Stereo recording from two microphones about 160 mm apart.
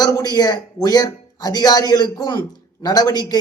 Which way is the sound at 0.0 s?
25° left (ahead or behind).